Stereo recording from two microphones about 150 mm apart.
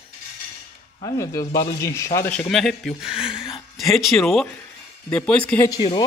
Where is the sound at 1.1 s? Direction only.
20° left (ahead or behind).